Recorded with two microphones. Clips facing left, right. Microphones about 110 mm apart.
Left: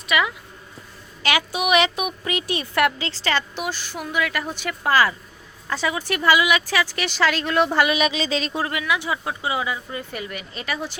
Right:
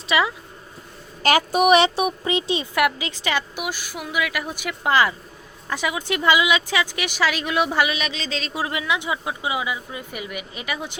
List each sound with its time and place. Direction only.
0.1 s speech: 30° right (ahead or behind)
1.2 s a woman's voice: 45° right (ahead or behind); by 7.9 s 5° right (ahead or behind)
7.9 s speech: 5° left (ahead or behind)
8.7 s a woman's voice: 20° right (ahead or behind)